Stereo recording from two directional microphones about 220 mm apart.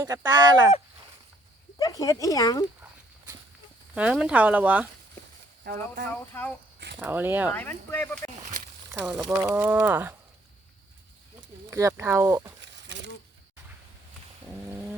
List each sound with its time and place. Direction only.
0.0 s speech: 15° right (ahead or behind)
1.8 s speech: 15° left (ahead or behind)
3.9 s speech: 5° right (ahead or behind)
5.7 s speech: 40° right (ahead or behind)
6.3 s speech: 10° left (ahead or behind)
7.0 s speech: 10° right (ahead or behind)
7.5 s speech: 10° left (ahead or behind)
8.9 s speech: 5° right (ahead or behind)
11.7 s speech: 15° right (ahead or behind)